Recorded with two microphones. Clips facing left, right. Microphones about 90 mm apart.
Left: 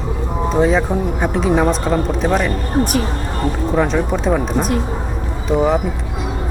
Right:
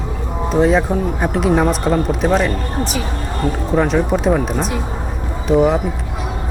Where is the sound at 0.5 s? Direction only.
Centre (ahead or behind).